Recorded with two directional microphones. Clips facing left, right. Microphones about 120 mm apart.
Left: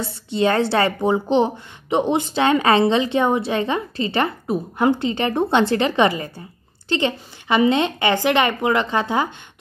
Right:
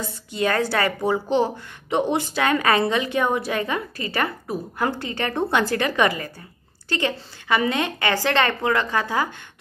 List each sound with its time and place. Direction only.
0.0 s a woman's voice: 30° left (ahead or behind)